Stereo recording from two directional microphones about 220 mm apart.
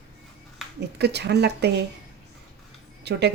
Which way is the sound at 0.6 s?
Centre (ahead or behind).